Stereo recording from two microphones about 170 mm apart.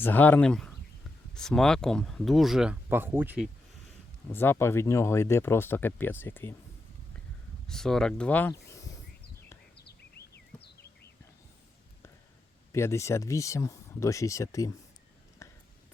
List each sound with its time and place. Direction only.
0.0 s speech: 10° left (ahead or behind); by 3.5 s 10° right (ahead or behind)
4.3 s speech: 15° left (ahead or behind)
7.7 s speech: 5° left (ahead or behind)
9.7 s a sound: 75° left (ahead or behind)
12.7 s speech: 15° left (ahead or behind)
15.4 s a sound: 20° left (ahead or behind)